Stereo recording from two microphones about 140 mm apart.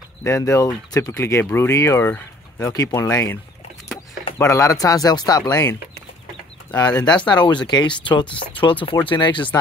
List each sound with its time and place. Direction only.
0.2 s speech: 20° left (ahead or behind)
4.5 s speech: 25° left (ahead or behind)